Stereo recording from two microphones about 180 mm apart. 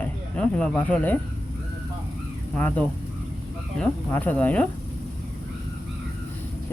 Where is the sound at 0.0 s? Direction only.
5° left (ahead or behind).